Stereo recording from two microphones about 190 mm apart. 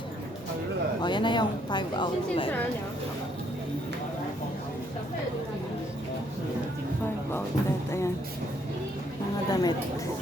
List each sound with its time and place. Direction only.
1.0 s a woman's voice: 25° left (ahead or behind)
7.9 s speech: 15° left (ahead or behind)
9.5 s a woman's voice: 20° left (ahead or behind)